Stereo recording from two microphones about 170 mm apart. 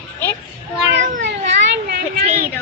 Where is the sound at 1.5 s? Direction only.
70° right (ahead or behind).